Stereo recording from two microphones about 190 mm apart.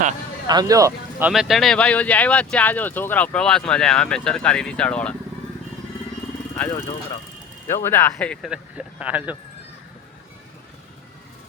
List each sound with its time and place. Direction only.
0.4 s speech: 20° right (ahead or behind)
1.3 s speech: centre (ahead or behind)
6.6 s speech: 15° left (ahead or behind)
8.4 s speech: 5° right (ahead or behind)